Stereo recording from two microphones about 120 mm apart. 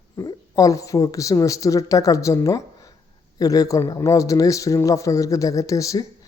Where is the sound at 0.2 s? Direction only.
30° left (ahead or behind).